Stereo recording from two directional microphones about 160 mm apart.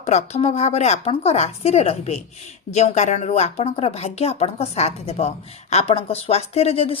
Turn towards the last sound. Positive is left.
turn(degrees=40)  # may be behind; listen again after turning